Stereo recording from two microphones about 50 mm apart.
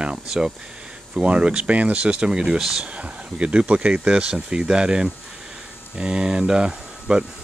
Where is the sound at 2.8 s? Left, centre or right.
Right.